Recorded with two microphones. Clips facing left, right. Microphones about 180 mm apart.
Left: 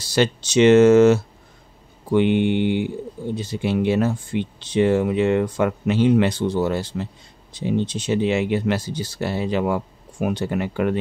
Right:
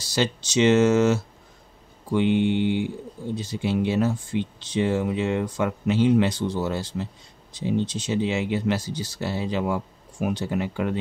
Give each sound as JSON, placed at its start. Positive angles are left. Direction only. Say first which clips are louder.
{"t": 0.0, "sound": "speech", "louder": "left 5 dB", "side_deg": 60}